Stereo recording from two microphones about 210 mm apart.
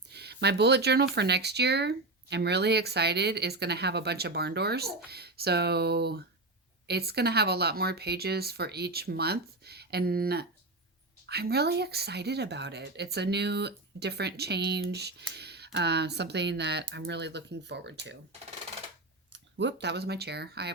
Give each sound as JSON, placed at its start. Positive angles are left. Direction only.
{"t": 0.1, "sound": "speech", "side_deg": -50}
{"t": 19.3, "sound": "speech", "side_deg": -60}